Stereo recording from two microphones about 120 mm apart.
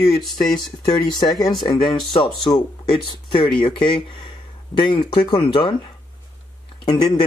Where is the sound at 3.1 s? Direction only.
40° left (ahead or behind).